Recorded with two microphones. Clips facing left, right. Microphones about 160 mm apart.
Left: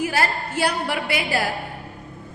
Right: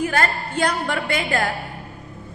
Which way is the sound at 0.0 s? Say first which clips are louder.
Right 1 dB; 10° left (ahead or behind).